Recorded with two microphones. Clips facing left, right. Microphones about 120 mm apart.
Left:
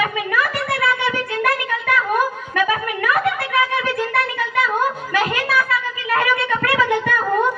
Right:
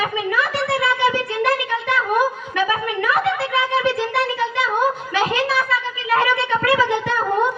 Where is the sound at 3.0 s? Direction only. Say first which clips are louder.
Left 1 dB; 25° right (ahead or behind).